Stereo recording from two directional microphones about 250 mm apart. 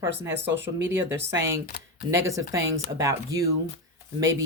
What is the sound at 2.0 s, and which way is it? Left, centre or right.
Speech, centre.